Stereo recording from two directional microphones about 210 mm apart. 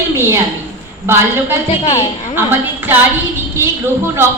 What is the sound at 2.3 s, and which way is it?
A woman's voice, 10° right (ahead or behind).